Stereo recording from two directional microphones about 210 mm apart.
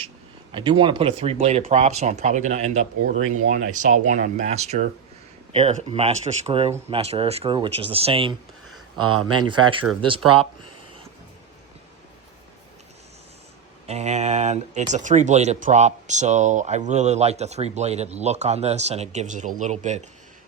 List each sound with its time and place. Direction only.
0.5 s speech: 20° right (ahead or behind)
9.0 s speech: 90° right
9.5 s speech: 25° right (ahead or behind)
13.8 s speech: 30° right (ahead or behind)